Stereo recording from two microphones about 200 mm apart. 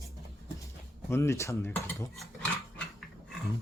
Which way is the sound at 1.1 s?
15° left (ahead or behind).